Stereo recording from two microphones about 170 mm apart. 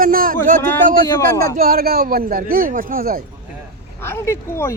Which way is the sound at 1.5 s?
60° right (ahead or behind).